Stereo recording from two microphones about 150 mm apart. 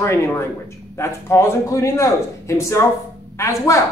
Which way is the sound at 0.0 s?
15° left (ahead or behind).